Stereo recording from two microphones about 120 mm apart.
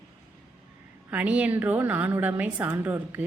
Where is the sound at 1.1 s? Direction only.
10° right (ahead or behind).